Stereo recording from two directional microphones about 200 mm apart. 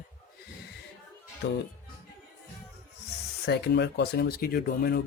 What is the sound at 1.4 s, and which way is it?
Speech, 50° left (ahead or behind).